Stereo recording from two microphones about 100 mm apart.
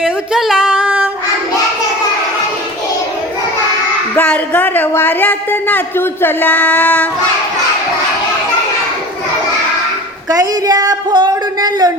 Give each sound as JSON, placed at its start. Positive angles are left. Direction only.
{"t": 0.0, "sound": "female singing", "side_deg": -5}
{"t": 4.1, "sound": "a woman's voice", "side_deg": 15}
{"t": 10.3, "sound": "speech", "side_deg": -40}